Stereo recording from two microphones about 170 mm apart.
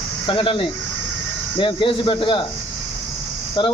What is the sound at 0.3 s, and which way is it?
Speech, 30° left (ahead or behind).